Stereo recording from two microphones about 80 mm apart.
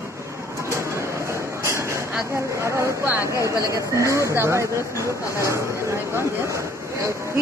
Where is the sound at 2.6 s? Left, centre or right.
Right.